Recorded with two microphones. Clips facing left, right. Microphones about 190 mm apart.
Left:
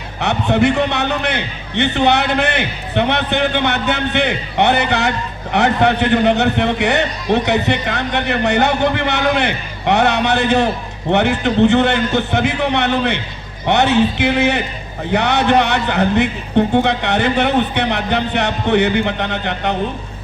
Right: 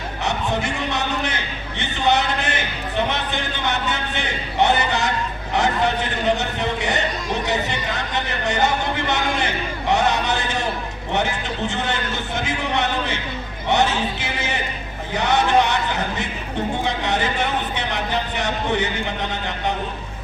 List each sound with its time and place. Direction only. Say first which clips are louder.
0.2 s a man's voice: left 9 dB; 65° left (ahead or behind)